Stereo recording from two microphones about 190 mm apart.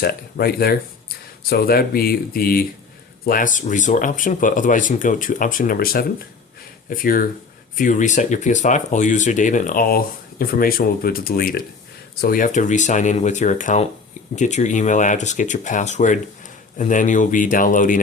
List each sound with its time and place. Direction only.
0.0 s speech: 55° left (ahead or behind)